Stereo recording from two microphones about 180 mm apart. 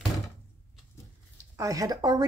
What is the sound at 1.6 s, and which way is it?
Speech, 20° right (ahead or behind).